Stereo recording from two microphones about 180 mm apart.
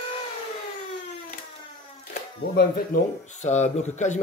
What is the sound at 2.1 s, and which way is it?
Speech, 55° left (ahead or behind).